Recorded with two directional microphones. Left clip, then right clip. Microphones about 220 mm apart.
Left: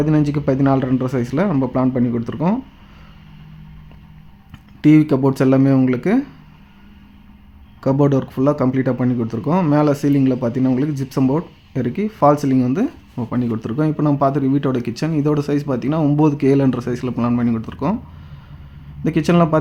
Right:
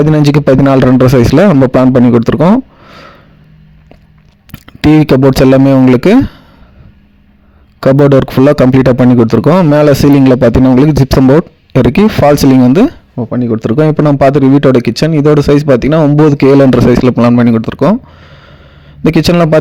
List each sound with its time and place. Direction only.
0.0 s speech: 45° right (ahead or behind)
4.5 s speech: 40° right (ahead or behind)
7.8 s speech: 45° right (ahead or behind)
13.1 s a man's voice: 30° right (ahead or behind)